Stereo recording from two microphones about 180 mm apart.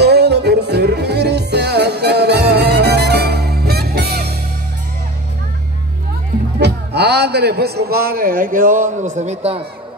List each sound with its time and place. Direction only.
0.0 s music: 65° right (ahead or behind)
6.6 s a man's voice: 65° right (ahead or behind); by 9.6 s 35° right (ahead or behind)